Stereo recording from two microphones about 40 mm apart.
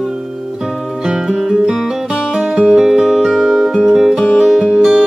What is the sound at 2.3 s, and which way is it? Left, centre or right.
Music, right.